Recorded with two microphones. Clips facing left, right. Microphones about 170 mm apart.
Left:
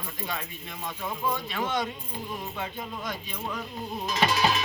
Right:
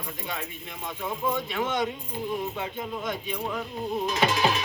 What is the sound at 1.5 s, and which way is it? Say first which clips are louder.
Speech: right 2 dB; 20° right (ahead or behind).